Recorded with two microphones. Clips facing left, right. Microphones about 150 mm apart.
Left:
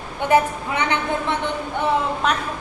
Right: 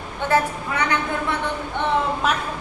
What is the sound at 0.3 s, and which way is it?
Speech, 20° left (ahead or behind).